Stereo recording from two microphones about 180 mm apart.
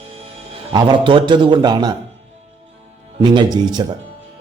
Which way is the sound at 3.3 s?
25° right (ahead or behind).